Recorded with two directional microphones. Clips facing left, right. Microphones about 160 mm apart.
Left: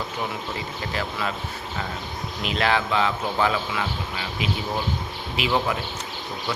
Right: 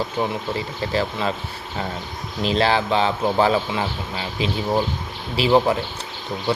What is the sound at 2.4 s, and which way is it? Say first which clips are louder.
Speech: right 4 dB; 30° right (ahead or behind).